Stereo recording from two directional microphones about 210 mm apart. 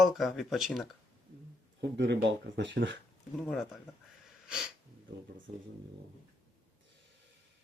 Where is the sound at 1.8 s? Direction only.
55° right (ahead or behind).